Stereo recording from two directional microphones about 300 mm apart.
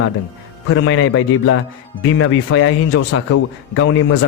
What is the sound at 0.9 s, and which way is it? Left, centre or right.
Speech, left.